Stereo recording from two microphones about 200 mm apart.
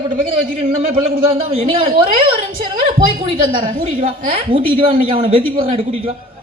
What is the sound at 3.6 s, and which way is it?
Speech, 40° right (ahead or behind).